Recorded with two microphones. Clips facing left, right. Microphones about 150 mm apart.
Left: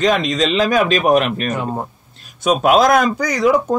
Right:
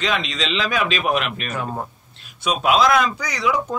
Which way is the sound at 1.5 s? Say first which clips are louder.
Left 5 dB; 20° left (ahead or behind).